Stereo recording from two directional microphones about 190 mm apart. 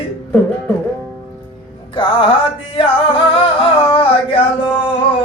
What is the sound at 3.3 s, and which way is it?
Music, 30° left (ahead or behind).